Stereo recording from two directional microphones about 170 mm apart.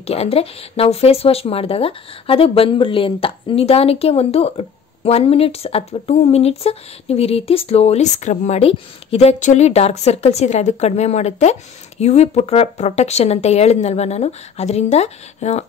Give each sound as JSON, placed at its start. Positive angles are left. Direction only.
{"t": 0.0, "sound": "speech", "side_deg": 35}